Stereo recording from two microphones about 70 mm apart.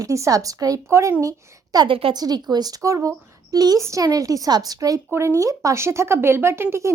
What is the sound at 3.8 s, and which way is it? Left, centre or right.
Speech, right.